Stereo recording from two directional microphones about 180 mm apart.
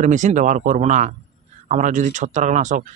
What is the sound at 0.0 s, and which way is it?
Speech, 45° right (ahead or behind).